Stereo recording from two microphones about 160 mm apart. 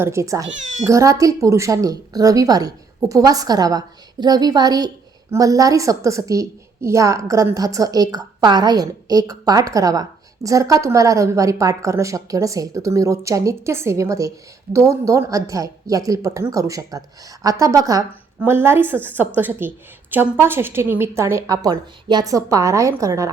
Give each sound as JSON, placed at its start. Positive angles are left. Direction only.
{"t": 0.0, "sound": "a woman's voice", "side_deg": -15}
{"t": 0.5, "sound": "speech", "side_deg": -50}
{"t": 0.9, "sound": "a woman's voice", "side_deg": -20}